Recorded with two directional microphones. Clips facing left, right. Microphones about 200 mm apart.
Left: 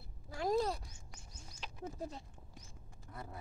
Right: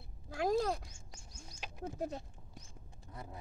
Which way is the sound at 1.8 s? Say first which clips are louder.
Right 4 dB; 65° right (ahead or behind).